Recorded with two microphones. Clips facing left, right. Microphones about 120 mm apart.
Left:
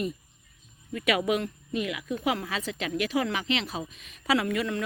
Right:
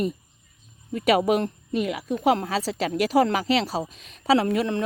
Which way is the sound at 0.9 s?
35° right (ahead or behind).